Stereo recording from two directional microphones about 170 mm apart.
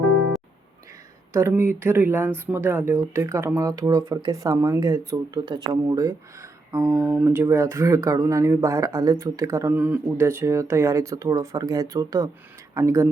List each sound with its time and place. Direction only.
1.3 s speech: 15° right (ahead or behind)
6.7 s speech: 5° right (ahead or behind)